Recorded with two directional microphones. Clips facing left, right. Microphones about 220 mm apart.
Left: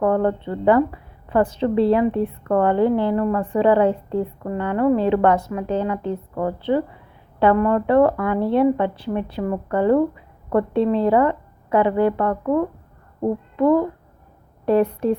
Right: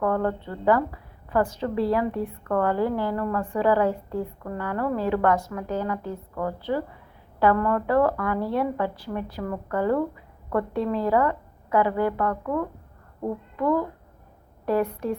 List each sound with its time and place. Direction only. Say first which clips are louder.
0.0 s a woman's voice: left 5 dB; 25° left (ahead or behind)